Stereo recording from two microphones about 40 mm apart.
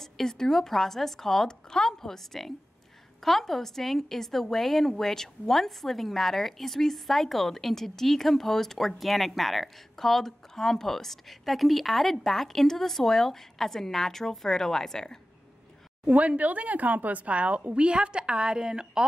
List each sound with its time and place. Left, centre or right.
0.0 s a woman's voice: centre
16.1 s speech: right; by 19.0 s centre